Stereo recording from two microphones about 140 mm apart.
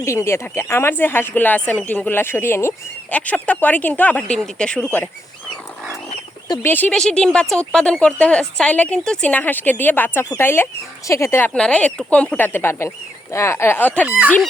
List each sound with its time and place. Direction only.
0.0 s speech: 20° left (ahead or behind)
6.6 s speech: 15° left (ahead or behind)
6.9 s speech: 5° left (ahead or behind)